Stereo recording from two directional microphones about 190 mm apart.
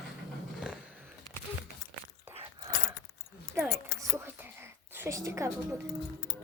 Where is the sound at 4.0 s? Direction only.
15° right (ahead or behind).